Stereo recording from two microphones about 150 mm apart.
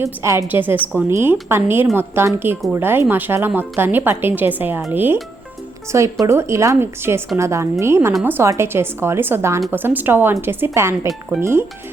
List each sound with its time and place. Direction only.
0.0 s speech: 20° right (ahead or behind)
6.2 s speech: 20° right (ahead or behind)